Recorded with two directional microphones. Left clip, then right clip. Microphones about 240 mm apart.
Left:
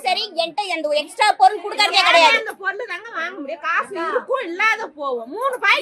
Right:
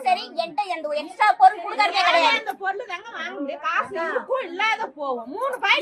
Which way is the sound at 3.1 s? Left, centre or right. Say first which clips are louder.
Left 3 dB; left.